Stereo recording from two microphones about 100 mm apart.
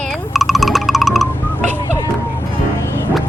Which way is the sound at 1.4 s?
20° left (ahead or behind).